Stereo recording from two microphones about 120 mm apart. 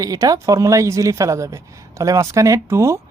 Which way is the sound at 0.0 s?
30° right (ahead or behind).